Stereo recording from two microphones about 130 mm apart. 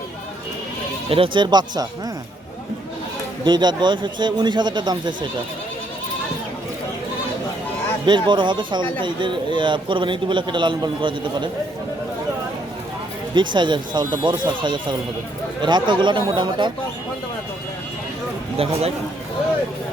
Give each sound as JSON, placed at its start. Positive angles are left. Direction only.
{"t": 1.1, "sound": "speech", "side_deg": -40}
{"t": 3.4, "sound": "speech", "side_deg": -35}
{"t": 8.0, "sound": "speech", "side_deg": -35}
{"t": 13.3, "sound": "speech", "side_deg": -35}
{"t": 18.5, "sound": "speech", "side_deg": -45}